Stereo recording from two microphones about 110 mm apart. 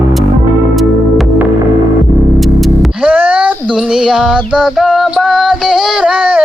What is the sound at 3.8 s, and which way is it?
Music, 5° right (ahead or behind).